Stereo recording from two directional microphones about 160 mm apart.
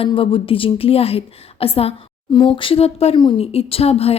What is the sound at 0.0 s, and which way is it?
A woman's voice, 35° left (ahead or behind).